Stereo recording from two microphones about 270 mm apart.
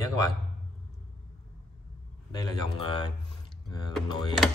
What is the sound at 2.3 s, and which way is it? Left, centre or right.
Speech, centre.